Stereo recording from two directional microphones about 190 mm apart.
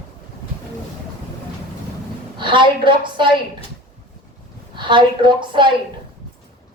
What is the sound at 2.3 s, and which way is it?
A woman's voice, 25° right (ahead or behind).